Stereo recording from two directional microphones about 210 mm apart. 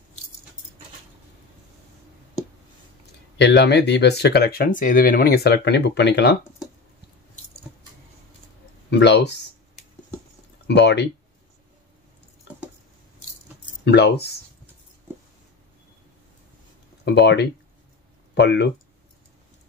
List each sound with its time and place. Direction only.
3.3 s speech: 55° left (ahead or behind)
8.9 s speech: 55° left (ahead or behind)
10.7 s speech: 55° left (ahead or behind)
13.8 s speech: 50° left (ahead or behind)
17.0 s speech: 55° left (ahead or behind)